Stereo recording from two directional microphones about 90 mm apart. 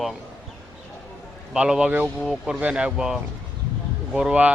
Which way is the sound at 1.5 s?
10° right (ahead or behind).